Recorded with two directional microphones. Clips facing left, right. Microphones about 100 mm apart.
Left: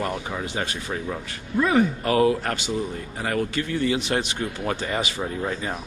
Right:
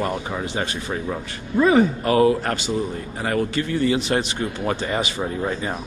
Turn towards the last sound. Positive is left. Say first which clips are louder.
# right 3 dB
turn(degrees=-25)  # may be behind; listen again after turning